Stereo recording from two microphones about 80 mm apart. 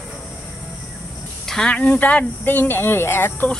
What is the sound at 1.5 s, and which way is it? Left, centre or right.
Speech, centre.